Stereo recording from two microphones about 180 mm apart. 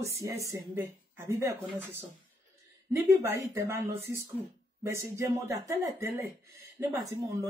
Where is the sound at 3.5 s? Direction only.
15° right (ahead or behind).